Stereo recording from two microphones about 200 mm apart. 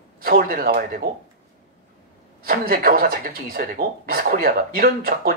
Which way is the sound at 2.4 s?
50° right (ahead or behind).